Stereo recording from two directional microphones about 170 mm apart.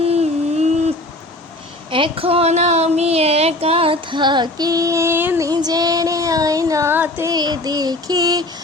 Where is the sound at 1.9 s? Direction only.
30° right (ahead or behind).